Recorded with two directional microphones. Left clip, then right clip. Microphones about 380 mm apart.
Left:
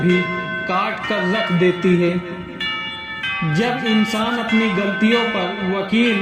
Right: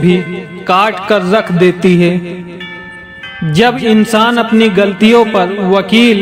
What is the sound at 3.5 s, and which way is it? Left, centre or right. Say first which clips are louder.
Speech: right 12 dB; right.